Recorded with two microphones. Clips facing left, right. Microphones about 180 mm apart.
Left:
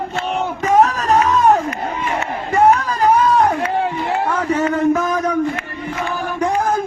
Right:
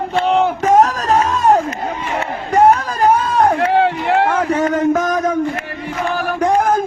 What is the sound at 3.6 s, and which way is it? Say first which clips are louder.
Run: right 5 dB; 90° right.